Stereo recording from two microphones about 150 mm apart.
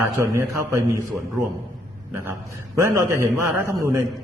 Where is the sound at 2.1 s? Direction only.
15° right (ahead or behind).